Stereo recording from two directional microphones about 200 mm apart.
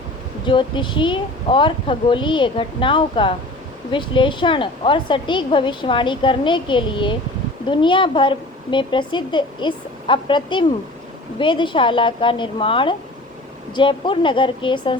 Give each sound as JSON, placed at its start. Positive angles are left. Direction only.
{"t": 0.4, "sound": "a woman's voice", "side_deg": 25}